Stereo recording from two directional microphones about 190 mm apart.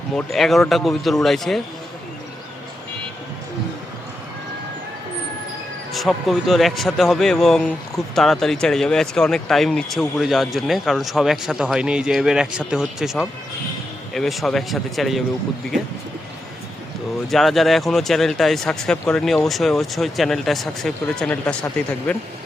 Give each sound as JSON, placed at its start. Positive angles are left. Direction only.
{"t": 0.2, "sound": "speech", "side_deg": 0}
{"t": 5.9, "sound": "speech", "side_deg": 0}
{"t": 17.2, "sound": "speech", "side_deg": 0}